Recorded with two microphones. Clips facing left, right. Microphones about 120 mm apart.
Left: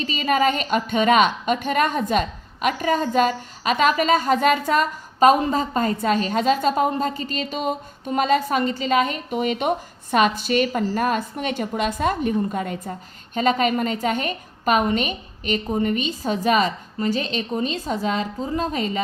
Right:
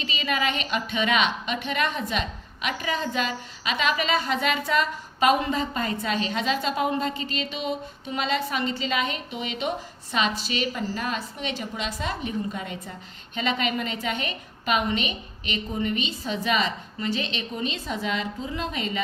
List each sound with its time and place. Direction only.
0.0 s a woman's voice: 45° left (ahead or behind)